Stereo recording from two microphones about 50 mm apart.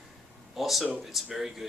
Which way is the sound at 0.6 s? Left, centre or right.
Centre.